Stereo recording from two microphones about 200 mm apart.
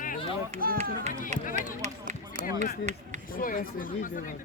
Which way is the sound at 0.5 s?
40° right (ahead or behind).